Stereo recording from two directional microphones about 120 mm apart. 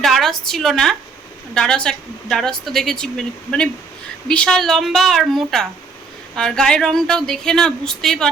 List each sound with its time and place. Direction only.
0.0 s a woman's voice: 5° left (ahead or behind)